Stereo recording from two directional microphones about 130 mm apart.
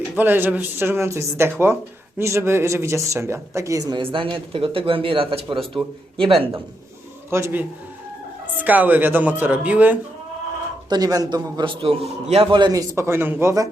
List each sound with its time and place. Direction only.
0.2 s speech: 15° right (ahead or behind)
4.0 s speech: 45° right (ahead or behind)
7.3 s speech: 20° right (ahead or behind)
8.6 s speech: 15° right (ahead or behind)
10.8 s speech: 30° right (ahead or behind)
11.6 s a man's voice: 40° right (ahead or behind)
13.0 s speech: 15° right (ahead or behind)